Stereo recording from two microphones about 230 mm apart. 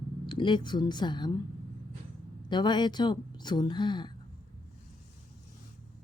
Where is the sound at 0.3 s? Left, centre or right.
Left.